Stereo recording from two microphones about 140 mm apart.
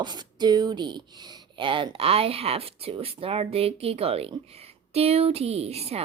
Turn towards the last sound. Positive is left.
turn(degrees=-45)  # may be behind; listen again after turning